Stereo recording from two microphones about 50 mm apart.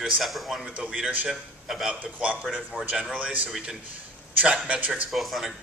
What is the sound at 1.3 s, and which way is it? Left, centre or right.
Speech, centre.